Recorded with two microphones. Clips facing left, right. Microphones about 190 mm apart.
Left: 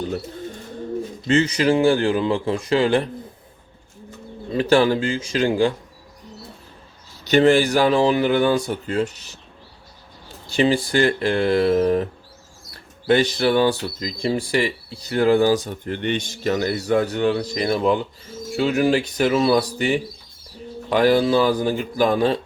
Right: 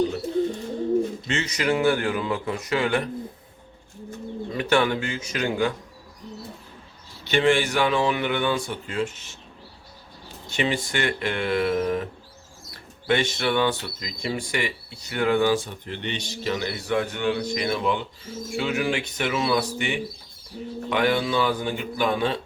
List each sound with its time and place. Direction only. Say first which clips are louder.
1.3 s speech: left 11 dB; 30° left (ahead or behind)
4.5 s speech: left 6 dB; 30° left (ahead or behind)
7.3 s speech: left 6 dB; 40° left (ahead or behind)
10.5 s speech: left 7 dB; 35° left (ahead or behind)
13.1 s speech: left 6 dB; 35° left (ahead or behind)